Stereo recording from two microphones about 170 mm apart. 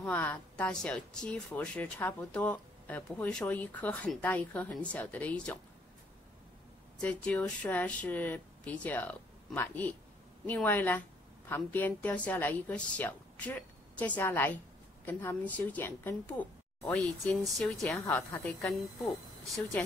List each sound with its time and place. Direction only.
0.0 s speech: 10° left (ahead or behind)
7.0 s speech: 5° left (ahead or behind)